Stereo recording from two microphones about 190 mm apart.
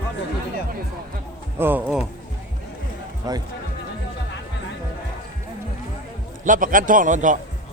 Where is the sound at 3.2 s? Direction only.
20° right (ahead or behind).